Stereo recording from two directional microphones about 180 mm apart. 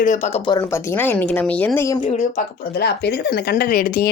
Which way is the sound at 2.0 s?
45° left (ahead or behind).